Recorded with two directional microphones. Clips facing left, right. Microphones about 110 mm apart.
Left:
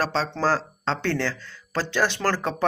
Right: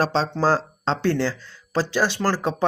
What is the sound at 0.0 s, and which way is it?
Speech, 25° right (ahead or behind).